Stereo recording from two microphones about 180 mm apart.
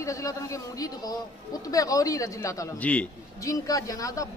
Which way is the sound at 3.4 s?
20° left (ahead or behind).